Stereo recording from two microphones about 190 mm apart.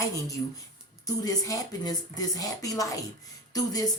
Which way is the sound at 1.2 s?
20° left (ahead or behind).